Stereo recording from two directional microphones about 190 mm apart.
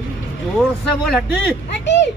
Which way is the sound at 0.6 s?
Centre (ahead or behind).